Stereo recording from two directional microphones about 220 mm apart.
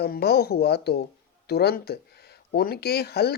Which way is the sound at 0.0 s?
45° left (ahead or behind).